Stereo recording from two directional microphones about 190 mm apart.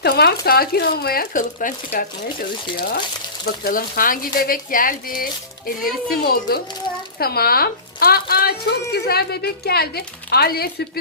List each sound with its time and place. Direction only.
0.0 s a woman's voice: 55° left (ahead or behind)